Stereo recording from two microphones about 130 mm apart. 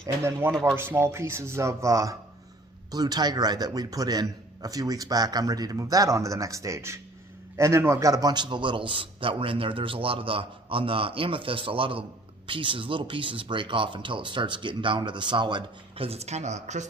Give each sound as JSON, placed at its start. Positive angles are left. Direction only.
{"t": 0.2, "sound": "a man's voice", "side_deg": -20}
{"t": 16.0, "sound": "speech", "side_deg": -55}